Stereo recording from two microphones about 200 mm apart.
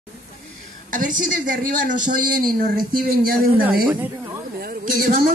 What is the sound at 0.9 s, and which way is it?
Speech, 40° right (ahead or behind).